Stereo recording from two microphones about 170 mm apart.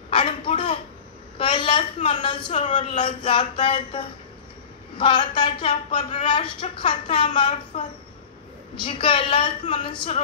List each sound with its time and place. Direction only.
0.1 s a sound: 30° left (ahead or behind)
2.0 s a woman's voice: 30° left (ahead or behind)
2.5 s speech: 40° left (ahead or behind)
3.0 s a woman's voice: 30° left (ahead or behind)
8.8 s a woman's voice: 30° left (ahead or behind)